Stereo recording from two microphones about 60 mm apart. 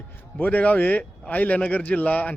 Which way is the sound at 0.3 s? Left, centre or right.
Left.